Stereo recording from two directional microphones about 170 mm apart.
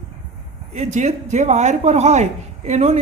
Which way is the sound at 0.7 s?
40° right (ahead or behind).